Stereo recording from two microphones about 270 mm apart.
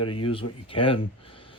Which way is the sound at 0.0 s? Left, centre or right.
Centre.